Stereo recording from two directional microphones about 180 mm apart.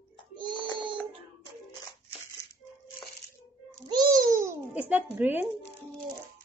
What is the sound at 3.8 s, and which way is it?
Babbling, 20° right (ahead or behind).